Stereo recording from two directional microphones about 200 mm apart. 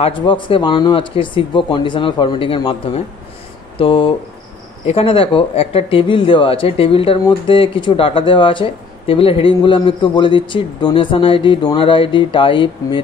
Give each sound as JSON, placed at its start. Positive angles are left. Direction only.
{"t": 0.0, "sound": "speech", "side_deg": 25}